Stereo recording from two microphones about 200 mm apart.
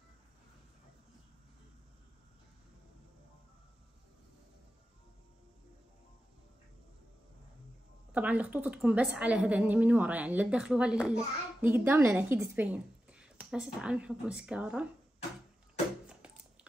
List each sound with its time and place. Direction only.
8.1 s a woman's voice: 10° right (ahead or behind)